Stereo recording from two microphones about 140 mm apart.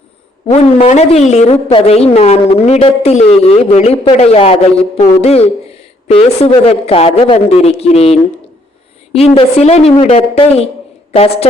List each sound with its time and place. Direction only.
0.5 s a woman's voice: 50° left (ahead or behind)